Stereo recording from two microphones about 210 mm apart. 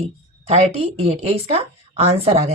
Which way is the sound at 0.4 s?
30° right (ahead or behind).